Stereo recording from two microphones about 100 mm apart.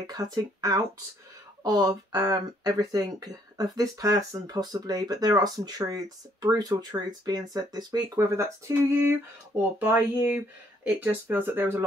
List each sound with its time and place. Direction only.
0.0 s speech: 40° right (ahead or behind)
9.6 s speech: 20° right (ahead or behind)